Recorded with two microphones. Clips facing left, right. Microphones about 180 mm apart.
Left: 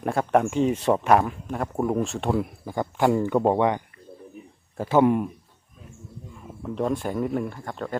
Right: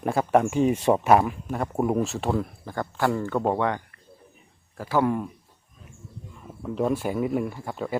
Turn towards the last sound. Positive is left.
turn(degrees=-5)  # may be behind; listen again after turning